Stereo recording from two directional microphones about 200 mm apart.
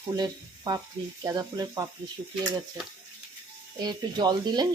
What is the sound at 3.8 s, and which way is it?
Speech, 20° right (ahead or behind).